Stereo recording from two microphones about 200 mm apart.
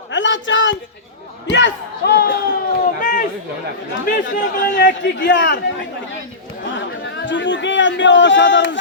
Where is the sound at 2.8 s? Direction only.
45° left (ahead or behind).